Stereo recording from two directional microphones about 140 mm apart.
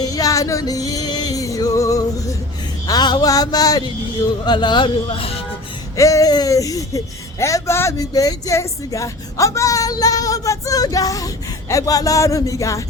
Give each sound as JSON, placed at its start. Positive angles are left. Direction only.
{"t": 0.0, "sound": "music", "side_deg": 25}
{"t": 2.8, "sound": "speech", "side_deg": 30}
{"t": 6.0, "sound": "speech", "side_deg": 25}